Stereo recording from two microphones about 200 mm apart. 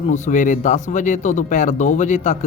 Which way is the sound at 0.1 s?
40° left (ahead or behind).